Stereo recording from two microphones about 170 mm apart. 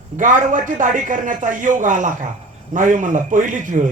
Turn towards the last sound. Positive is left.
turn(degrees=-50)  # may be behind; listen again after turning